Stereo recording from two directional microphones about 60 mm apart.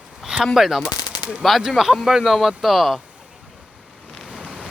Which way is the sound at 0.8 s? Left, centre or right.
Left.